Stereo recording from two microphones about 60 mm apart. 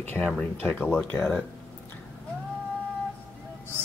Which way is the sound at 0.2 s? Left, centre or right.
Left.